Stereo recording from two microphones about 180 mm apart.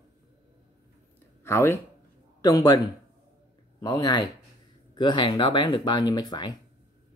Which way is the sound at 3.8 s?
20° left (ahead or behind).